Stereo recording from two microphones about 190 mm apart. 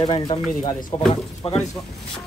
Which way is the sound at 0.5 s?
45° left (ahead or behind).